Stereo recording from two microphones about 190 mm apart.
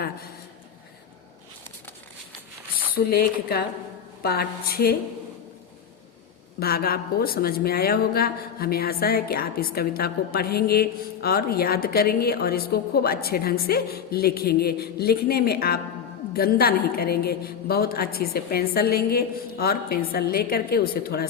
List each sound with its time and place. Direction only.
2.9 s speech: 55° left (ahead or behind)
6.6 s speech: 55° left (ahead or behind)